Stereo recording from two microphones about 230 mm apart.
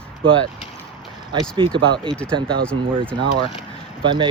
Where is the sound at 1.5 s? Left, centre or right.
Right.